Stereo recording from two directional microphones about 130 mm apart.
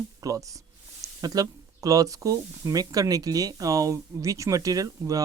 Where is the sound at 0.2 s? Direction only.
25° right (ahead or behind).